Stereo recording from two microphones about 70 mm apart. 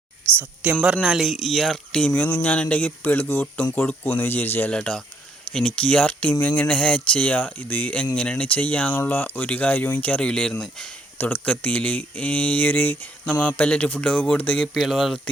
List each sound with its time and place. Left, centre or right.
0.3 s speech: right
1.0 s speech: centre; by 3.9 s left
4.0 s speech: left
4.7 s speech: centre
10.2 s speech: centre
11.2 s speech: left
14.8 s speech: centre